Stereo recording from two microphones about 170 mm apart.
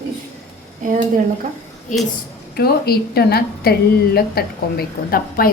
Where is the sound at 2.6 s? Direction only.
65° left (ahead or behind).